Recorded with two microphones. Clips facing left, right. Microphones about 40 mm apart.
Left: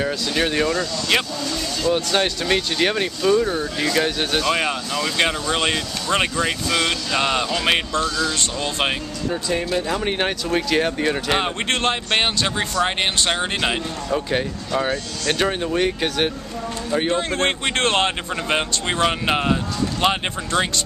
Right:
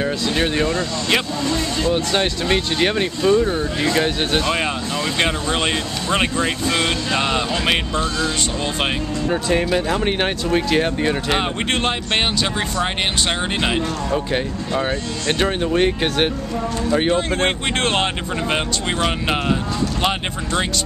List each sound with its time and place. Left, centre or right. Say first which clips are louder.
0.3 s speech: even; centre
1.5 s speech: right 1 dB; right
2.1 s speech: right 1 dB; centre
6.7 s speech: right 1 dB; centre
9.3 s speech: right 3 dB; right; by 14.4 s centre
14.7 s speech: right 1 dB; centre
17.1 s speech: right 2 dB; centre